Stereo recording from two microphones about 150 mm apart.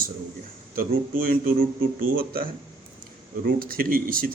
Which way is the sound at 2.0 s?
80° right.